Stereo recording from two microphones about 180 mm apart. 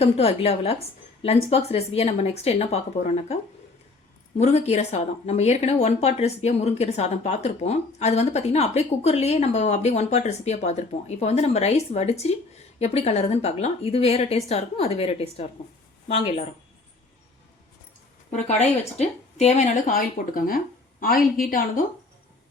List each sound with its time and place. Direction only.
0.0 s speech: 35° left (ahead or behind)
4.4 s speech: 35° left (ahead or behind)
18.9 s speech: 40° left (ahead or behind)